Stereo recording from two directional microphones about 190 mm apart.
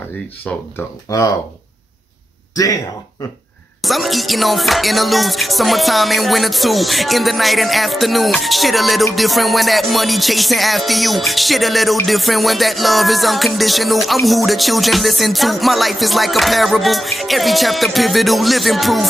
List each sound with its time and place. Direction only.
1.1 s speech: 20° left (ahead or behind)
2.5 s speech: 20° left (ahead or behind)
3.8 s music: centre (ahead or behind)